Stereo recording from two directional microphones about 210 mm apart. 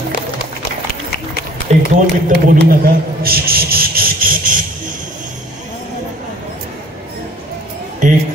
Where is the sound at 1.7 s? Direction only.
30° right (ahead or behind).